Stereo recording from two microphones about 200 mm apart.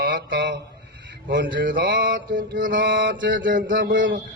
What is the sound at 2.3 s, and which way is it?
Mantra, 45° right (ahead or behind).